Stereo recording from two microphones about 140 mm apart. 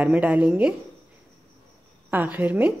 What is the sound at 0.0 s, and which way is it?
Speech, 10° right (ahead or behind).